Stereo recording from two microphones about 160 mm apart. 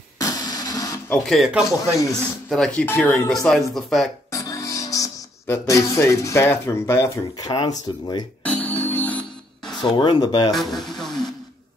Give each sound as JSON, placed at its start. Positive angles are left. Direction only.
{"t": 0.2, "sound": "printer", "side_deg": 20}
{"t": 1.1, "sound": "speech", "side_deg": 0}
{"t": 3.4, "sound": "speech", "side_deg": 0}
{"t": 4.3, "sound": "speech", "side_deg": 20}
{"t": 8.5, "sound": "music", "side_deg": 10}
{"t": 9.8, "sound": "speech", "side_deg": 30}
{"t": 10.5, "sound": "speech", "side_deg": 0}
{"t": 11.0, "sound": "a sound", "side_deg": 5}